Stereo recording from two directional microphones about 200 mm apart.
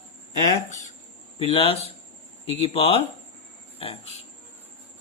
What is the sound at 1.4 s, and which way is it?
Speech, 30° left (ahead or behind).